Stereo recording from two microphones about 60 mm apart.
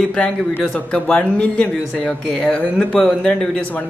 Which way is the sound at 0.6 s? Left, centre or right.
Left.